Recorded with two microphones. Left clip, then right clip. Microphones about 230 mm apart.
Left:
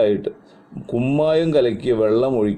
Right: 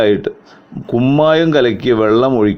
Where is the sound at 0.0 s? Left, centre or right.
Right.